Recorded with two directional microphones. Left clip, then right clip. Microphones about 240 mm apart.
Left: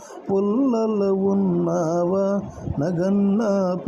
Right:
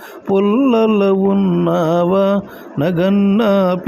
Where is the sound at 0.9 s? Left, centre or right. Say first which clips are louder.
Right 7 dB; right.